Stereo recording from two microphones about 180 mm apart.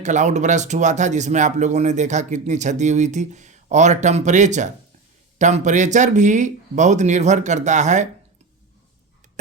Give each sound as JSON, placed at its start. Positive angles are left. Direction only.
{"t": 0.0, "sound": "speech", "side_deg": -40}